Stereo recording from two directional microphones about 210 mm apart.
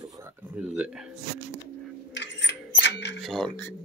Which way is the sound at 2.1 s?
55° left (ahead or behind).